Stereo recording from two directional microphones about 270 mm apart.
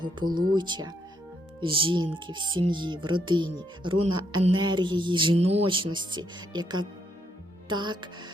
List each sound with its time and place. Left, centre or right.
0.3 s speech: right
0.5 s music: centre